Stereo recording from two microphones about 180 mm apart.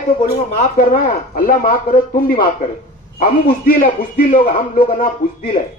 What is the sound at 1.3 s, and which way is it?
A man's voice, 50° left (ahead or behind).